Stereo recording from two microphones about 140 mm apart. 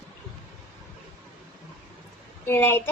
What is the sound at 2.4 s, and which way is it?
Speech, 15° left (ahead or behind).